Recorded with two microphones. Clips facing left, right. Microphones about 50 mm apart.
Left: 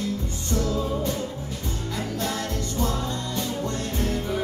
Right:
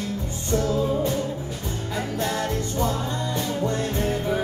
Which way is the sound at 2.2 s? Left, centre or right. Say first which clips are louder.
Right 5 dB; centre.